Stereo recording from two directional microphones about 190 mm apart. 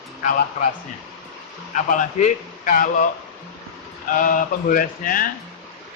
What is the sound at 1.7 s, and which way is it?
Speech, 40° left (ahead or behind).